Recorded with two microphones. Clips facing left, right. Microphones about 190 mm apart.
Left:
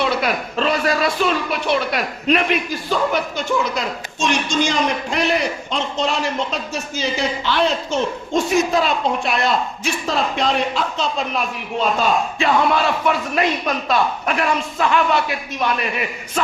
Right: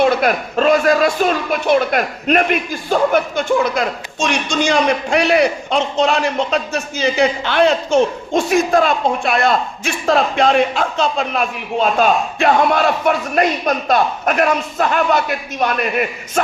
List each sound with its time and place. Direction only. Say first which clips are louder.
0.0 s a man's voice: right 6 dB; 50° right (ahead or behind)
4.7 s a man's voice: right 5 dB; 65° right (ahead or behind); by 16.4 s 45° right (ahead or behind)